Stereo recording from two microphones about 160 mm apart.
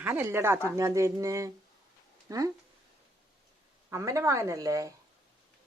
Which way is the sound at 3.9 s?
20° right (ahead or behind).